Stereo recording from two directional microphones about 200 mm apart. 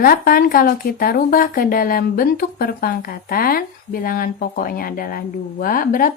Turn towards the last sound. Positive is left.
turn(degrees=45)  # may be behind; listen again after turning